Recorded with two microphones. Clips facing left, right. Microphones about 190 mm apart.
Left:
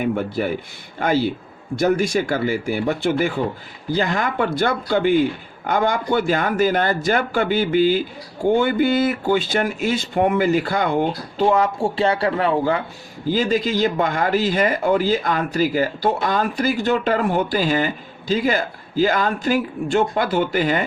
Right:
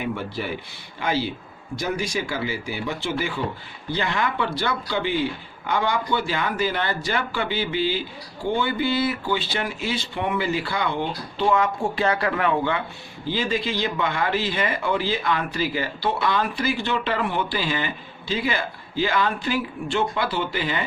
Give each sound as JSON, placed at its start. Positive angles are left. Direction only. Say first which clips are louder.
{"t": 0.0, "sound": "speech", "louder": "left 7 dB", "side_deg": 50}